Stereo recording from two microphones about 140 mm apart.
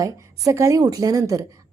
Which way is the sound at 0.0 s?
20° right (ahead or behind).